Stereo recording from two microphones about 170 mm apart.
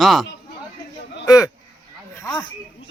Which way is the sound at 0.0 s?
Centre (ahead or behind).